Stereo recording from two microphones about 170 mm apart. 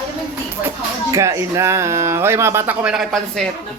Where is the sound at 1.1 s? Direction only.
15° right (ahead or behind); by 3.5 s centre (ahead or behind).